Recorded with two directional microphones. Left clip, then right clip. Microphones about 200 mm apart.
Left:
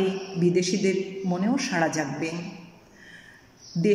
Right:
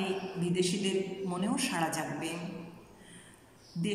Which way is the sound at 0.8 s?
30° left (ahead or behind).